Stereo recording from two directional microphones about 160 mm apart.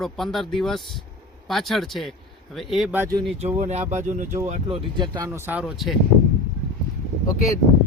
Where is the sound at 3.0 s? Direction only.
20° right (ahead or behind).